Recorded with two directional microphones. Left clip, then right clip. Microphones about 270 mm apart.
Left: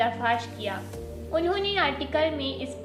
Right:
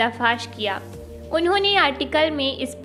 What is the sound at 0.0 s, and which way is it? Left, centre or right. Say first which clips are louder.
A woman's voice: right 4 dB; right.